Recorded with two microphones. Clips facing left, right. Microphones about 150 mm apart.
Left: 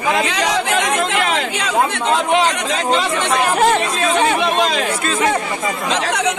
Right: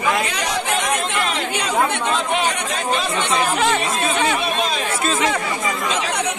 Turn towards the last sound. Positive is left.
turn(degrees=80)